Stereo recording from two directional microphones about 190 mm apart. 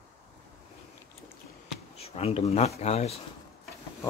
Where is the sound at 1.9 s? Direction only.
35° left (ahead or behind).